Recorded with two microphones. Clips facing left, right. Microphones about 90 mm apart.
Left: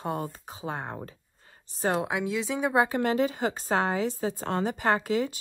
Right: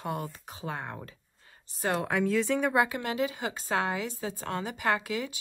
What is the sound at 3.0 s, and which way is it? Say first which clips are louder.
A woman's voice: left 5 dB; 40° left (ahead or behind).